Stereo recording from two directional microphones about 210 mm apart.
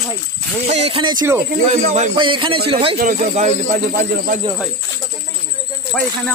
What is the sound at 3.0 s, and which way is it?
Speech, 35° right (ahead or behind).